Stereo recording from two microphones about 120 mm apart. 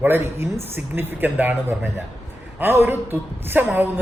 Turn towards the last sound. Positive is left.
turn(degrees=-15)  # may be behind; listen again after turning